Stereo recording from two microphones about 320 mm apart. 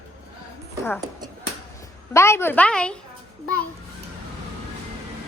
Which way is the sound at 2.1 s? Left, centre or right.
Centre.